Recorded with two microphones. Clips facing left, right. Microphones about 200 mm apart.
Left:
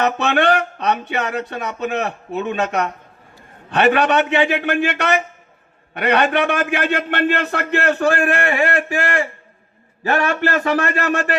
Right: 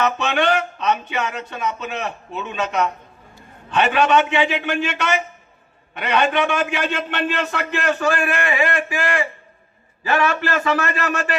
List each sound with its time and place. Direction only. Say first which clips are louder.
0.2 s a man's voice: left 3 dB; 55° left (ahead or behind)